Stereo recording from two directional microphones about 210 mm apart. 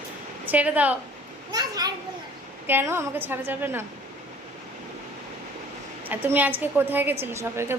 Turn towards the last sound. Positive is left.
turn(degrees=-10)  # may be behind; listen again after turning